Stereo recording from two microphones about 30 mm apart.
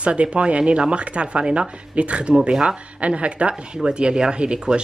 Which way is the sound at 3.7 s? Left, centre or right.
Right.